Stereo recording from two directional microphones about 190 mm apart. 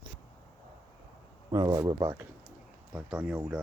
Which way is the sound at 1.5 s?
20° right (ahead or behind).